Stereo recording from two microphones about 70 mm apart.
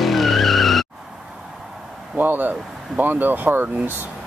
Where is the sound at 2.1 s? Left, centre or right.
Right.